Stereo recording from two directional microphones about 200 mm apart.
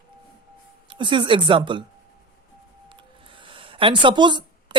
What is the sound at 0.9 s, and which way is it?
Speech, 25° right (ahead or behind).